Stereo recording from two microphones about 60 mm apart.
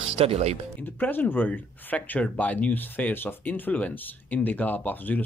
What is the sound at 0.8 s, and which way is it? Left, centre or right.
Speech, left.